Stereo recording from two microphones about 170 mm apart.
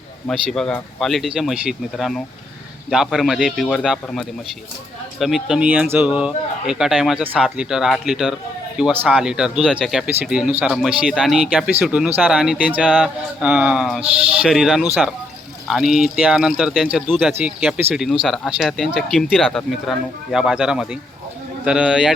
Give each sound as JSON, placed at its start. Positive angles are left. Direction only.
{"t": 0.3, "sound": "speech", "side_deg": 5}